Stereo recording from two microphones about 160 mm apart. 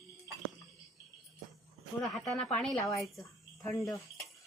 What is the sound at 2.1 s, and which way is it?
Speech, centre (ahead or behind).